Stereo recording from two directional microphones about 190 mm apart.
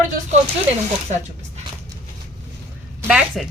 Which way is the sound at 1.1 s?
40° right (ahead or behind).